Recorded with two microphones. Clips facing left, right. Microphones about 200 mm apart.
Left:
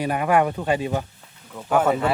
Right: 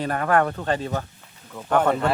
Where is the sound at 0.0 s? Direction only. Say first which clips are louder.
Left 1 dB; 10° left (ahead or behind).